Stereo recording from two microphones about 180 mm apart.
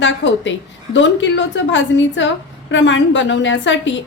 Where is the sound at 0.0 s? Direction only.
90° left.